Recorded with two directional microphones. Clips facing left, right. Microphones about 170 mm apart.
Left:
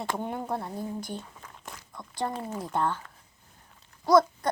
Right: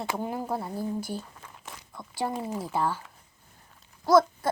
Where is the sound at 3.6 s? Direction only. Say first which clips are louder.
Even; centre (ahead or behind).